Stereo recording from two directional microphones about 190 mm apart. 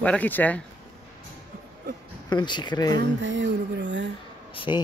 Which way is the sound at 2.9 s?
75° right (ahead or behind).